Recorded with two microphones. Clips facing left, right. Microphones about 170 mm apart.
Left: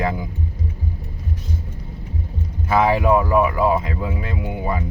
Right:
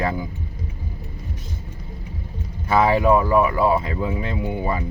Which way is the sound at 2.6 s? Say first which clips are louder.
Even; 5° left (ahead or behind).